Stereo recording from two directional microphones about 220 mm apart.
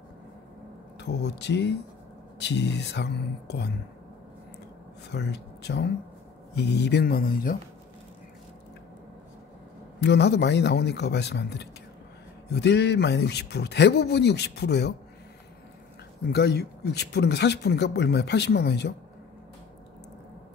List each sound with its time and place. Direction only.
0.9 s speech: 50° left (ahead or behind)
5.1 s speech: 50° left (ahead or behind)
9.9 s speech: 50° left (ahead or behind)
16.3 s speech: 45° left (ahead or behind)